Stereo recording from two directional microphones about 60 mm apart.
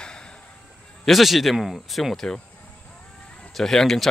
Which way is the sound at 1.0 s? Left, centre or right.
Centre.